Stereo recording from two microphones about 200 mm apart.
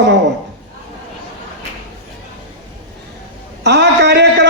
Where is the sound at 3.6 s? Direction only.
60° right (ahead or behind).